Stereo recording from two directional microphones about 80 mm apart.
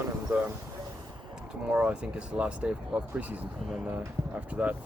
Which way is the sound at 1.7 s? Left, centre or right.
Centre.